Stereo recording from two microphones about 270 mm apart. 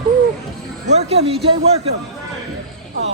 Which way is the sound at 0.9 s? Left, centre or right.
Right.